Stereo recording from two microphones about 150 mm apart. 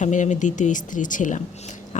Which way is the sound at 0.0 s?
55° left (ahead or behind).